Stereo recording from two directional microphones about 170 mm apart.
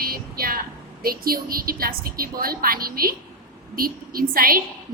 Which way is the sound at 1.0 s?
60° right (ahead or behind).